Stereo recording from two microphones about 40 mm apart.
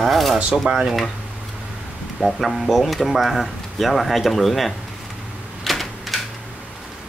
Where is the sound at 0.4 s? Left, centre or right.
Right.